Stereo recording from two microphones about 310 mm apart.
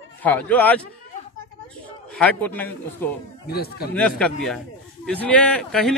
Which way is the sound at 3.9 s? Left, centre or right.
Centre.